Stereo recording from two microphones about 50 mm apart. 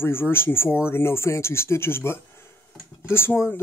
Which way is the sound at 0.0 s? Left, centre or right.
Left.